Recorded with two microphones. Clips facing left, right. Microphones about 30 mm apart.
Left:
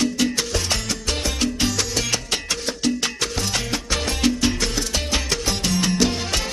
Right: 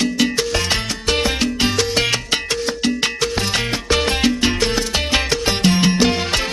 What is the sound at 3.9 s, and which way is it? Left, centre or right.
Music, right.